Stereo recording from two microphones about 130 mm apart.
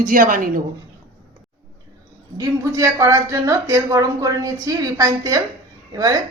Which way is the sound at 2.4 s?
25° right (ahead or behind).